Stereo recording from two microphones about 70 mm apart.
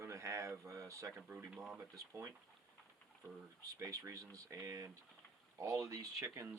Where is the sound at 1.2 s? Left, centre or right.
Right.